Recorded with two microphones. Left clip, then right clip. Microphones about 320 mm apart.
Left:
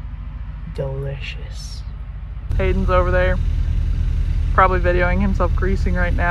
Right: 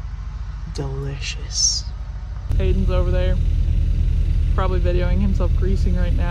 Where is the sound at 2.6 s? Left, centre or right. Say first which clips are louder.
Left 7 dB; centre.